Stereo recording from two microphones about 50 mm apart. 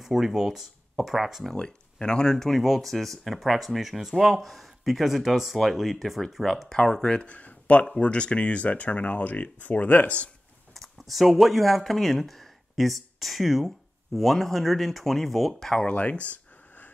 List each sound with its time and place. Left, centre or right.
0.0 s speech: centre
1.5 s speech: centre
7.3 s a sound: left
7.8 s speech: centre
10.7 s speech: centre
15.9 s speech: left